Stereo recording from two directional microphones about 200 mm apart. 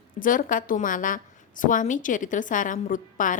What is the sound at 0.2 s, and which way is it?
A woman's voice, 40° left (ahead or behind).